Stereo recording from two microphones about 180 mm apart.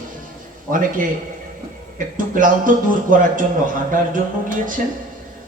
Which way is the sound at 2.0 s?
45° right (ahead or behind).